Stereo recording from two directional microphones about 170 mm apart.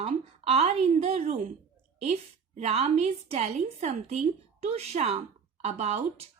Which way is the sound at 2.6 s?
40° right (ahead or behind).